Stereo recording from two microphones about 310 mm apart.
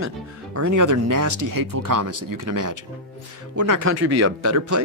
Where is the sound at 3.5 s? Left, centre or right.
Right.